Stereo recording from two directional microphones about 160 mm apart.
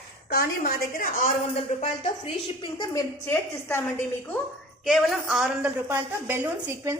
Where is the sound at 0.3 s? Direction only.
75° left (ahead or behind).